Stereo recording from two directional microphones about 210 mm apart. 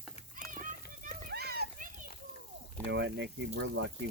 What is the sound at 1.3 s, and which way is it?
Children playing, 50° right (ahead or behind).